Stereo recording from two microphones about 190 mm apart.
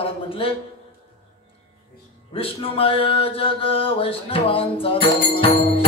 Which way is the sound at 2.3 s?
30° left (ahead or behind).